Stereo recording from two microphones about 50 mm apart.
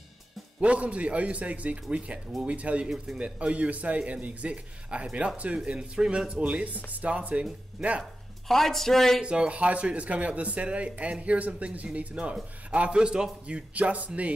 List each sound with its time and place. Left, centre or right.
0.6 s speech: right
6.4 s speech: right
8.5 s speech: centre
9.2 s speech: centre